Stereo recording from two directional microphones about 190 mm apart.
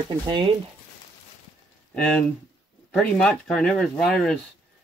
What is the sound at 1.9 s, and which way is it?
Speech, 5° left (ahead or behind).